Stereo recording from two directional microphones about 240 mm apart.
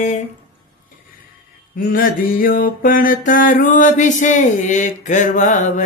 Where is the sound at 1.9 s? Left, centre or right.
Left.